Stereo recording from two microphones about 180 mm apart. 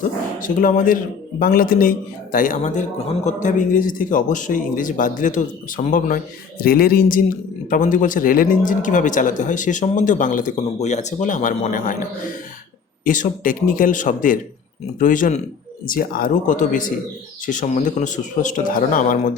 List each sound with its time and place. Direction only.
0.3 s speech: 50° left (ahead or behind)
13.1 s speech: 50° left (ahead or behind)